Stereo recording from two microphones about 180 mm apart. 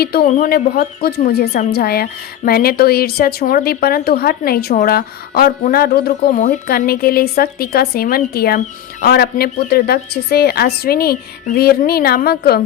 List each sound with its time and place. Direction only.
0.0 s a woman's voice: 60° left (ahead or behind)